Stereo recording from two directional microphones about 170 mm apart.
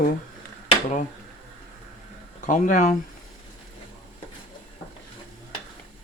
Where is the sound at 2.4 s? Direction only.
50° left (ahead or behind).